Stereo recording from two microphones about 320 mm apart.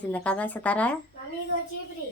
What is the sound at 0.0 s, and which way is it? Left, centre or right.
Speech, centre.